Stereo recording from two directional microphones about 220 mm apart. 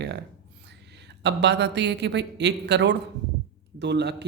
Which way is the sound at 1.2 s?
50° right (ahead or behind).